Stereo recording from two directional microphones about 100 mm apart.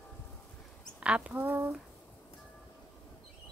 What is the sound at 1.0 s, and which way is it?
Speech, 10° right (ahead or behind).